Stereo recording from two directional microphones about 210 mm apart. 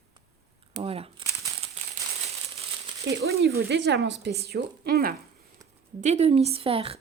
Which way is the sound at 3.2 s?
50° right (ahead or behind).